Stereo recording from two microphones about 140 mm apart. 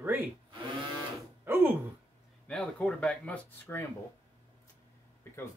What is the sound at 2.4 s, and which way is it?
Speech, 10° left (ahead or behind).